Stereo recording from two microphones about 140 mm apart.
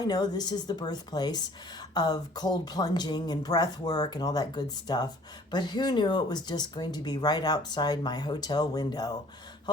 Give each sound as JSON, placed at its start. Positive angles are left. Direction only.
{"t": 0.0, "sound": "speech", "side_deg": 30}